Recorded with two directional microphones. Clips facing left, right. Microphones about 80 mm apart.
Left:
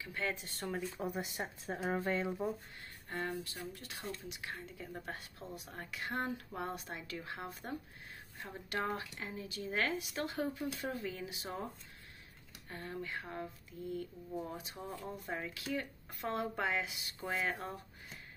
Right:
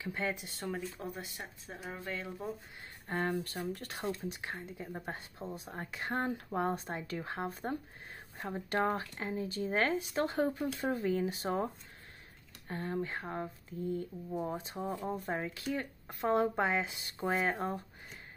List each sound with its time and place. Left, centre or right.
0.0 s speech: right
0.5 s speech: centre
1.1 s speech: left
1.9 s speech: left
2.4 s speech: centre
3.1 s speech: right
3.7 s speech: right
4.2 s speech: right
12.6 s speech: right
15.1 s speech: right
15.4 s speech: right